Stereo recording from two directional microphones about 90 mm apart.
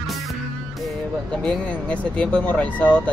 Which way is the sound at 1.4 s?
15° left (ahead or behind).